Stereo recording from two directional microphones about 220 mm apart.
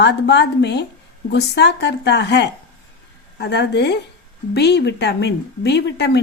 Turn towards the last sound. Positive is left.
turn(degrees=50)  # may be behind; listen again after turning